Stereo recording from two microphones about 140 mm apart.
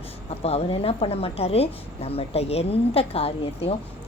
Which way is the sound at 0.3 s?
45° left (ahead or behind).